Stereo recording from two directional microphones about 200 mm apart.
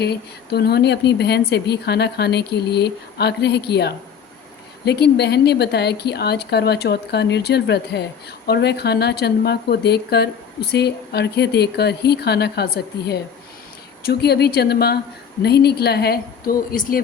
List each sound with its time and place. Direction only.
0.0 s a woman's voice: 55° left (ahead or behind)